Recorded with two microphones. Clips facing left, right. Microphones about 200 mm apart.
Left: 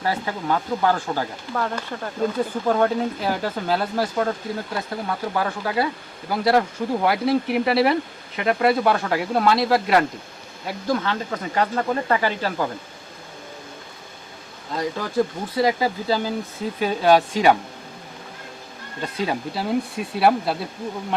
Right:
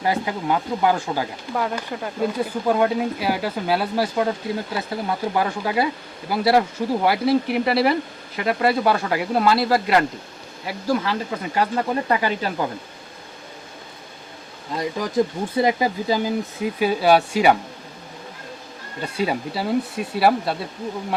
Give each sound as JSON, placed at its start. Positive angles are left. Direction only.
{"t": 0.0, "sound": "speech", "side_deg": -15}
{"t": 15.5, "sound": "speech", "side_deg": -20}
{"t": 19.1, "sound": "speech", "side_deg": -5}